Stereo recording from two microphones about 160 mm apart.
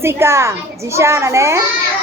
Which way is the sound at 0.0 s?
15° right (ahead or behind).